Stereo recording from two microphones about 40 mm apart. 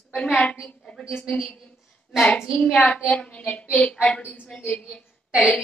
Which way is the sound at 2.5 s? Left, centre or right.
Left.